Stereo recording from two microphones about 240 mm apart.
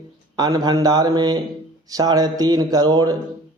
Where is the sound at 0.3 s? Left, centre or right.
Centre.